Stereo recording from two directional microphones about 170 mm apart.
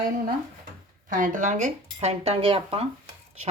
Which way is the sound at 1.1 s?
50° right (ahead or behind).